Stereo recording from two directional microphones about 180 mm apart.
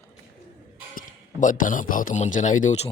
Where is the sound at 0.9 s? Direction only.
45° left (ahead or behind).